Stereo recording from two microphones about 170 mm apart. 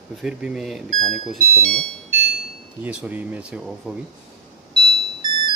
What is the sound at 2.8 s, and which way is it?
Speech, 5° right (ahead or behind).